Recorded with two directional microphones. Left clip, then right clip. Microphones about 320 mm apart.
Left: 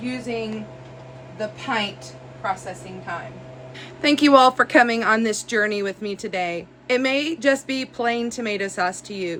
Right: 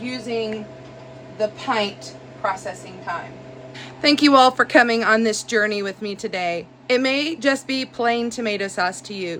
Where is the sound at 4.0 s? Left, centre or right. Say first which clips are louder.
Even; centre.